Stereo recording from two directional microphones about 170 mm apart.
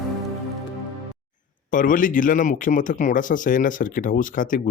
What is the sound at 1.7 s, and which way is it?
Speech, 50° left (ahead or behind).